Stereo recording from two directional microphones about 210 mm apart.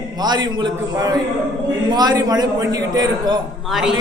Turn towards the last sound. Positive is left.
turn(degrees=0)  # may be behind; listen again after turning